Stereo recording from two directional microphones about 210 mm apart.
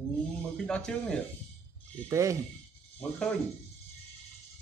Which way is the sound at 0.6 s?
5° left (ahead or behind).